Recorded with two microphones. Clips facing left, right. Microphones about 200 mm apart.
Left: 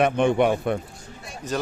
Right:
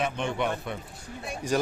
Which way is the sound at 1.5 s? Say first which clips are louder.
Right 1 dB; 10° right (ahead or behind).